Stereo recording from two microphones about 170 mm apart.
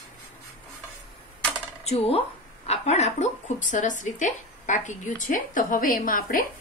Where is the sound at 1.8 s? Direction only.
35° left (ahead or behind).